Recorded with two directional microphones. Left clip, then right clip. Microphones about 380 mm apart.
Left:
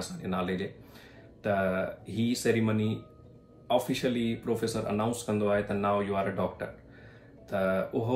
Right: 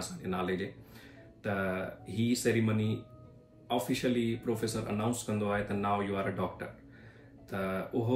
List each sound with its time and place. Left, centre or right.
0.2 s speech: centre